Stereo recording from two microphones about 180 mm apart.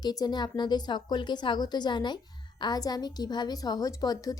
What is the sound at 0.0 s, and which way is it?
A woman's voice, 20° left (ahead or behind).